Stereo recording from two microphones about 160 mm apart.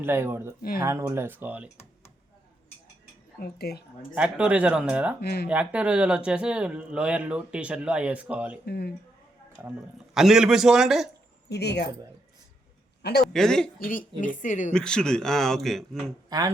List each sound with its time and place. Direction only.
0.0 s speech: 15° right (ahead or behind)
3.3 s speech: 80° left
4.1 s speech: 10° right (ahead or behind)
5.2 s speech: 80° left
5.5 s speech: 10° right (ahead or behind)
8.6 s speech: 90° left
10.2 s a man's voice: 5° right (ahead or behind)
11.4 s speech: 90° left
13.0 s a man's voice: 90° left
13.2 s a man's voice: 5° left (ahead or behind)
13.7 s a woman's voice: 60° left (ahead or behind)
14.7 s a man's voice: 5° left (ahead or behind)